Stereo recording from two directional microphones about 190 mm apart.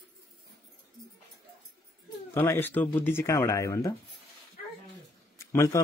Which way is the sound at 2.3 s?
10° left (ahead or behind).